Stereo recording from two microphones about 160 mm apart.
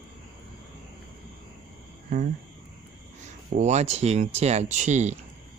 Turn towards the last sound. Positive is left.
turn(degrees=-45)  # may be behind; listen again after turning